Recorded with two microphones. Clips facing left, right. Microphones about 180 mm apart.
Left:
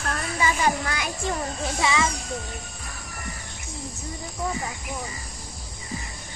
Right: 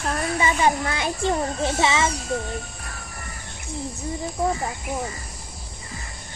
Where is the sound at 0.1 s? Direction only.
25° right (ahead or behind).